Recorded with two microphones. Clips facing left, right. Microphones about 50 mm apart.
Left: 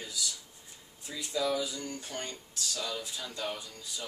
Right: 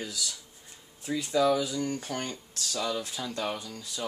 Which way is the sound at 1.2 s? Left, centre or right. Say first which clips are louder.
Right 6 dB; right.